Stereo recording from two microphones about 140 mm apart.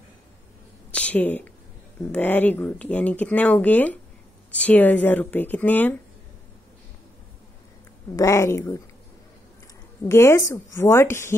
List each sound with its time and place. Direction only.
0.9 s speech: 10° left (ahead or behind)
8.2 s a woman's voice: 20° left (ahead or behind)
10.0 s a woman's voice: 20° left (ahead or behind)